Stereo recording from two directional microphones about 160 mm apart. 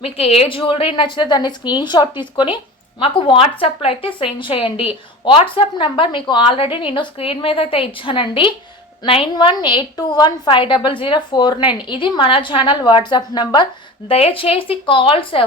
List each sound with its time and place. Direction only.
0.0 s a woman's voice: 40° left (ahead or behind)